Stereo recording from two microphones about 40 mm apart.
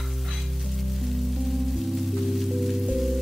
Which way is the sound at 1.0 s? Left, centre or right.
Centre.